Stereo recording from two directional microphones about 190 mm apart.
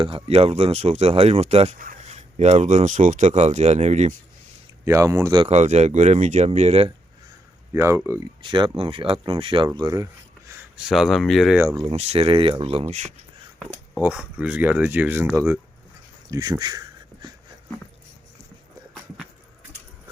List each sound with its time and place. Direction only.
0.0 s speech: 30° right (ahead or behind)
4.9 s speech: 15° right (ahead or behind)
5.5 s speech: 35° right (ahead or behind)
7.7 s speech: 15° right (ahead or behind)
8.4 s speech: 25° right (ahead or behind)
10.5 s speech: 5° right (ahead or behind)
11.8 s speech: 30° right (ahead or behind)
14.0 s speech: 5° right (ahead or behind)
16.3 s speech: 20° right (ahead or behind)